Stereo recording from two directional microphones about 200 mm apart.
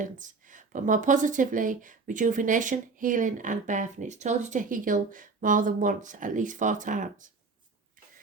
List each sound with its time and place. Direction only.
0.0 s speech: 40° right (ahead or behind)